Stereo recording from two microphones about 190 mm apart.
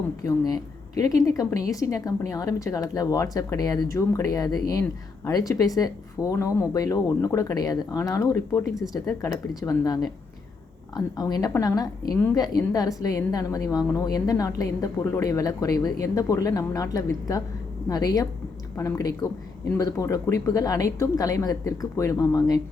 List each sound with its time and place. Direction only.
0.2 s a woman's voice: 20° left (ahead or behind)